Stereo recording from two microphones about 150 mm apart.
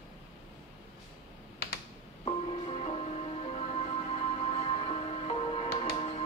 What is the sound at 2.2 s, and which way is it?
Music, 40° left (ahead or behind).